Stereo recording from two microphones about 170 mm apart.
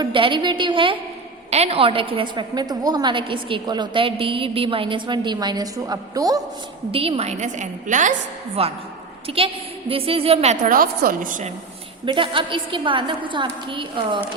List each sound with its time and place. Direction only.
0.0 s a woman's voice: 30° right (ahead or behind)
6.9 s a woman's voice: 35° right (ahead or behind)
8.6 s a woman's voice: 35° right (ahead or behind)
12.0 s a woman's voice: 30° right (ahead or behind)